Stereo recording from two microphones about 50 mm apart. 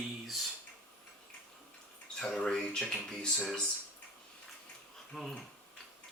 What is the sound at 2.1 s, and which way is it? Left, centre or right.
Speech, centre.